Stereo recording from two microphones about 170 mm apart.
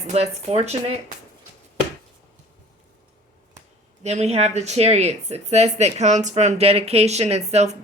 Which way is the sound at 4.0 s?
40° right (ahead or behind).